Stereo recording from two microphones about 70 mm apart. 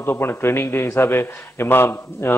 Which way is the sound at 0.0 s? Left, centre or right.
Left.